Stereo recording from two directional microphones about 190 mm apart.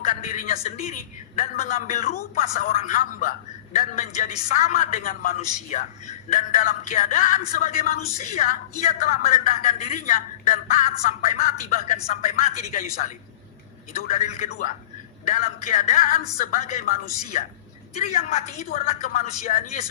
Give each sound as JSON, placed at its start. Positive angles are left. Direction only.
{"t": 0.0, "sound": "a man's voice", "side_deg": 40}
{"t": 14.1, "sound": "a man's voice", "side_deg": 45}